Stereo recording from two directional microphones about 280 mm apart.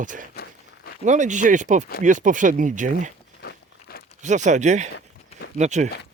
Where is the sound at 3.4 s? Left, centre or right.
Left.